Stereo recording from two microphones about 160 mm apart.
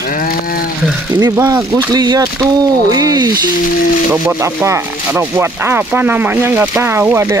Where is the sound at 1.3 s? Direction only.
20° right (ahead or behind).